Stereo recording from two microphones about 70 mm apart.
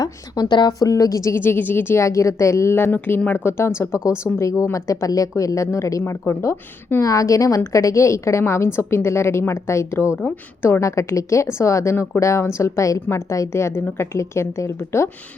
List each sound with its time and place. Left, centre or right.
0.0 s speech: left
0.7 s a woman's voice: left
1.4 s a woman's voice: left
2.0 s a woman's voice: left
3.8 s a woman's voice: left
10.2 s a woman's voice: left
10.7 s a woman's voice: left